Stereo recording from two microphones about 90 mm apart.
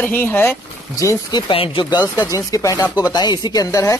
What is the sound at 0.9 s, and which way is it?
Speech, 40° left (ahead or behind).